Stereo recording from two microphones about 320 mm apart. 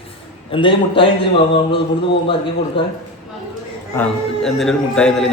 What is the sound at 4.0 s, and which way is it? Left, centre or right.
A man's voice, centre.